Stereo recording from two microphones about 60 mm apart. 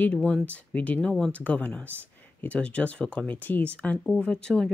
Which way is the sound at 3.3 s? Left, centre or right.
Left.